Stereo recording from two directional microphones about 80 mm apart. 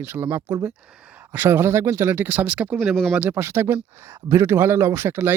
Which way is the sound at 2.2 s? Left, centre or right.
Centre.